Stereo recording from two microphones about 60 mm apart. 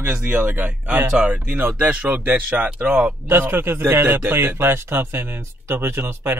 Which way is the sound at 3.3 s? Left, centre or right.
Right.